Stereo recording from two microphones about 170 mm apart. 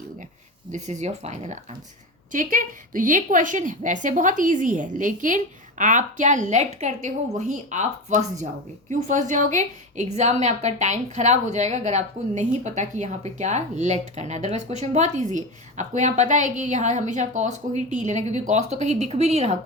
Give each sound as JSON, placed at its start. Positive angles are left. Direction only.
{"t": 0.7, "sound": "a woman's voice", "side_deg": -45}
{"t": 2.3, "sound": "a woman's voice", "side_deg": -50}